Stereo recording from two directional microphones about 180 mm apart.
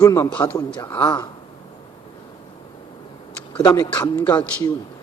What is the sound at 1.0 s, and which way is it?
Speech, 25° left (ahead or behind).